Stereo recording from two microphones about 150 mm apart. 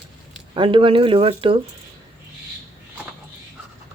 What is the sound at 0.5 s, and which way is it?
Speech, 35° right (ahead or behind).